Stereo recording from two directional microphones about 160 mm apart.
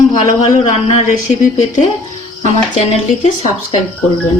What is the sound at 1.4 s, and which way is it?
Speech, 45° left (ahead or behind).